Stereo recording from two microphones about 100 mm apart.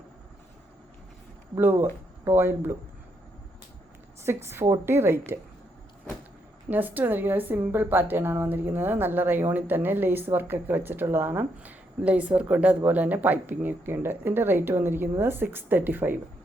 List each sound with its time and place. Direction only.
1.5 s a woman's voice: 20° right (ahead or behind)
4.2 s a woman's voice: 25° right (ahead or behind)
6.7 s a woman's voice: 20° right (ahead or behind)